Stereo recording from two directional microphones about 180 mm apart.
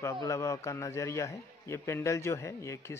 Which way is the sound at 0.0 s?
15° left (ahead or behind).